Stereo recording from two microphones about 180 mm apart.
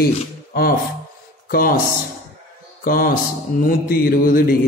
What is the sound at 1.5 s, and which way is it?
Mantra, 55° left (ahead or behind).